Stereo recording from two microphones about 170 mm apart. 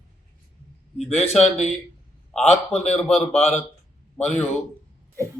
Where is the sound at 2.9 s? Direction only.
10° left (ahead or behind).